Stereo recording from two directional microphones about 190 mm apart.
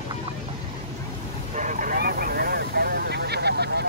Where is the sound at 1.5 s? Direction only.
40° right (ahead or behind).